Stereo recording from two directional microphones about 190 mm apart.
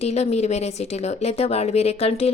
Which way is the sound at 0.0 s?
35° left (ahead or behind).